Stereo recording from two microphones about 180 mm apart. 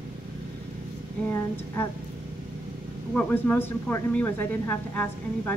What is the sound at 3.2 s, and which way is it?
A woman's voice, 10° left (ahead or behind).